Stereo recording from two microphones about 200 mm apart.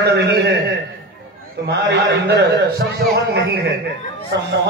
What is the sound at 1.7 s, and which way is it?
Speech, 60° right (ahead or behind).